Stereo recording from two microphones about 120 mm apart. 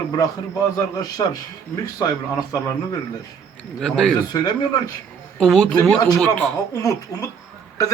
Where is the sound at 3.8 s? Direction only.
Centre (ahead or behind).